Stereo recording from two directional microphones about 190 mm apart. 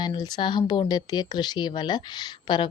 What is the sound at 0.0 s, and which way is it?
Speech, 20° left (ahead or behind).